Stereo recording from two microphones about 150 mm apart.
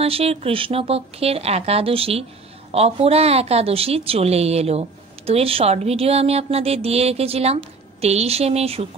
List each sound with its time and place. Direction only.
0.0 s a woman's voice: 40° right (ahead or behind)